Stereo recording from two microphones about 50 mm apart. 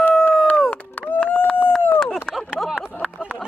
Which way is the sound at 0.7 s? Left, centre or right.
Left.